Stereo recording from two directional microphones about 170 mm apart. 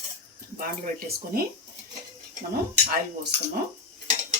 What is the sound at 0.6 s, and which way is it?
Speech, 60° right (ahead or behind).